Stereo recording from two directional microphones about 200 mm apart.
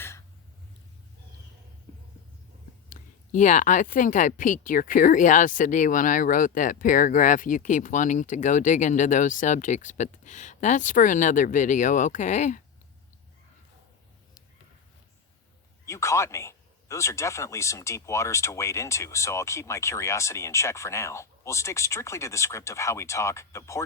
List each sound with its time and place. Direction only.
2.9 s speech: 40° left (ahead or behind)
15.9 s a man's voice: 15° left (ahead or behind)